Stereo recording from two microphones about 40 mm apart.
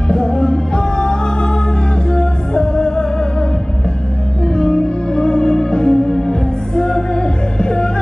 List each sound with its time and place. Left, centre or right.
0.1 s music: left
4.6 s music: centre